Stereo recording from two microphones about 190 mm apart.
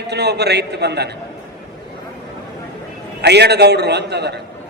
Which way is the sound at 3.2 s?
60° right (ahead or behind).